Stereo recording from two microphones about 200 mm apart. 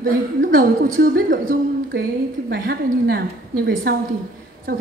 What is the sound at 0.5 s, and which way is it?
A woman's voice, 45° right (ahead or behind).